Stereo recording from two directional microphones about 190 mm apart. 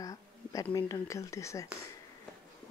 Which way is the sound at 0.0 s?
20° left (ahead or behind).